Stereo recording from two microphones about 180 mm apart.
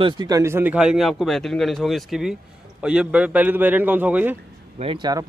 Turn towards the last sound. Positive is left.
turn(degrees=-20)  # may be behind; listen again after turning